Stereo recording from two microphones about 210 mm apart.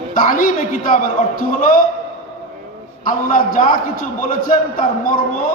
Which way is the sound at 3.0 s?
40° left (ahead or behind).